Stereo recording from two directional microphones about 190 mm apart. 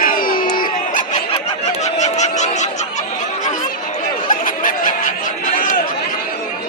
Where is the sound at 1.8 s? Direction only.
35° left (ahead or behind).